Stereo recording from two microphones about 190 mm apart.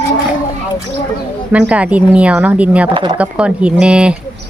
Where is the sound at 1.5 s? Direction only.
5° right (ahead or behind).